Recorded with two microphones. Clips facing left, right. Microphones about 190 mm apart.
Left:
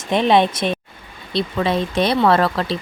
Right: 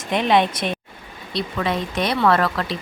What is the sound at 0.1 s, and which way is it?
Speech, 25° left (ahead or behind).